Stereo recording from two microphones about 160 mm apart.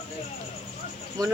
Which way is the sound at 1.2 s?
25° right (ahead or behind).